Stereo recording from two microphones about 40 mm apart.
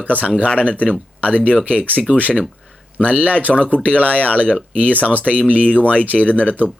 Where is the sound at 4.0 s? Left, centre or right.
Right.